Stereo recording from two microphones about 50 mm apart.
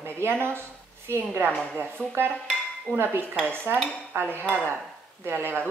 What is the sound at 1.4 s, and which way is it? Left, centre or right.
A woman's voice, right.